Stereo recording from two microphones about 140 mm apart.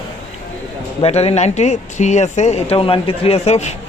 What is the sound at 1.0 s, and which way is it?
Speech, 45° left (ahead or behind).